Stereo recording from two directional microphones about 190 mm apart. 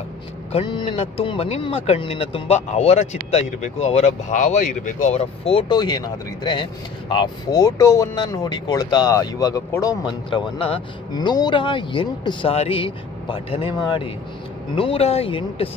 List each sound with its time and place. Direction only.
0.5 s speech: 25° left (ahead or behind)